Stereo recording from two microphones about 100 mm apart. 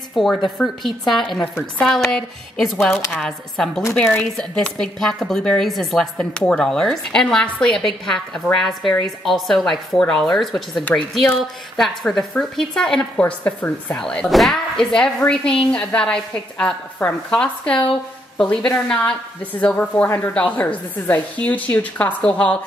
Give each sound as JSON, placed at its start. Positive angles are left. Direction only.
{"t": 0.1, "sound": "a woman's voice", "side_deg": 0}
{"t": 11.8, "sound": "speech", "side_deg": 5}
{"t": 14.0, "sound": "speech", "side_deg": 5}